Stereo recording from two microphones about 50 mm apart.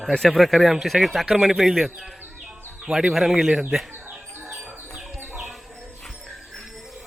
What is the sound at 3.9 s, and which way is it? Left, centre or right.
Bird, right.